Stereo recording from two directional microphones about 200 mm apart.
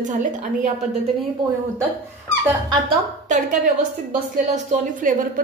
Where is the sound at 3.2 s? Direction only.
35° right (ahead or behind).